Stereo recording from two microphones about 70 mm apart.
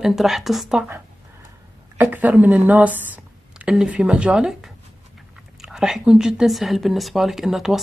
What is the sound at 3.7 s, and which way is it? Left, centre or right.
Speech, centre.